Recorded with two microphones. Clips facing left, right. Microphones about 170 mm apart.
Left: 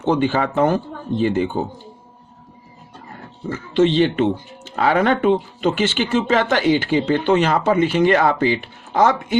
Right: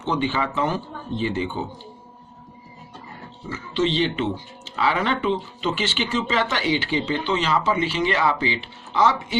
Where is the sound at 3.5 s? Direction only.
50° left (ahead or behind).